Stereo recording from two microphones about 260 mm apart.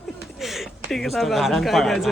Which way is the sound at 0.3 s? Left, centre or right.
Centre.